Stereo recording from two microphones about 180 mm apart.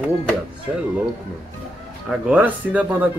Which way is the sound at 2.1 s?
10° right (ahead or behind).